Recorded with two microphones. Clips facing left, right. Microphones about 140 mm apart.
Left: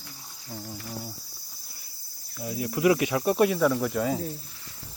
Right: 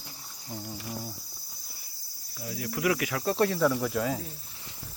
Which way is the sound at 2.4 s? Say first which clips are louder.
Left 6 dB; 25° left (ahead or behind).